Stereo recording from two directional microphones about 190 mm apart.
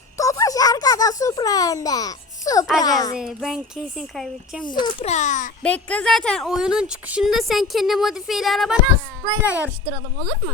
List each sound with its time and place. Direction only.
0.2 s a sound: 15° left (ahead or behind)
2.8 s speech: 20° left (ahead or behind)
3.2 s a woman's voice: centre (ahead or behind)
4.6 s a child's voice: 25° left (ahead or behind); by 5.5 s 40° left (ahead or behind)
5.6 s a woman's voice: 5° left (ahead or behind)
9.2 s a child's voice: 10° right (ahead or behind)